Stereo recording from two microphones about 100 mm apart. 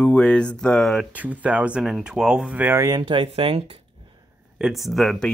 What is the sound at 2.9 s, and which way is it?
Speech, 55° right (ahead or behind).